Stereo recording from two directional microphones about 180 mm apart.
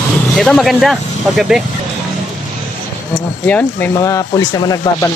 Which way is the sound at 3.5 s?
10° left (ahead or behind).